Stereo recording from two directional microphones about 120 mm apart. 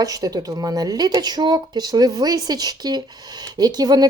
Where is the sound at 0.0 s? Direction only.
30° right (ahead or behind).